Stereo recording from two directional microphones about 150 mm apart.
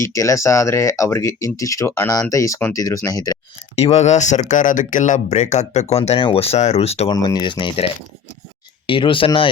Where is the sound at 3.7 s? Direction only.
45° left (ahead or behind).